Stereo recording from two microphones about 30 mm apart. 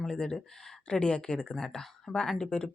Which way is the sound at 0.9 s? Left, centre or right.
Left.